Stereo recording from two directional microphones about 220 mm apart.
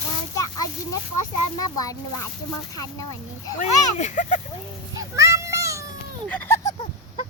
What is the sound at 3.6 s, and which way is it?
Speech, 35° left (ahead or behind).